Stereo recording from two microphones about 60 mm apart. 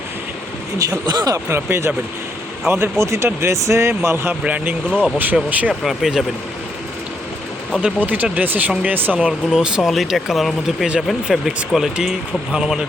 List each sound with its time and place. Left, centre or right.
0.8 s speech: right
1.5 s speech: right
4.4 s speech: right
5.8 s speech: centre
7.8 s speech: right
9.5 s speech: centre
10.8 s speech: centre
11.4 s speech: centre